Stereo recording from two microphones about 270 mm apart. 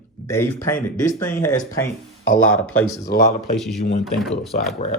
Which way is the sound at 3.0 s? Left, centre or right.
Left.